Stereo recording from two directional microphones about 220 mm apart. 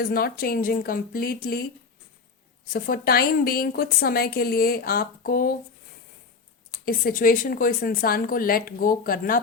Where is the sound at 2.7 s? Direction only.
45° left (ahead or behind).